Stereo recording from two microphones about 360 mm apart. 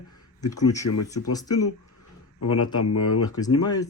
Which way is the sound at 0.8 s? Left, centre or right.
Left.